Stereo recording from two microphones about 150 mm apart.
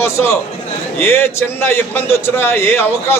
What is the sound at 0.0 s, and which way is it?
A man's voice, 15° left (ahead or behind).